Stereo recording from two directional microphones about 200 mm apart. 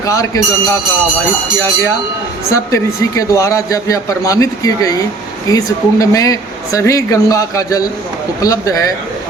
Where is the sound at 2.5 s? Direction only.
15° left (ahead or behind).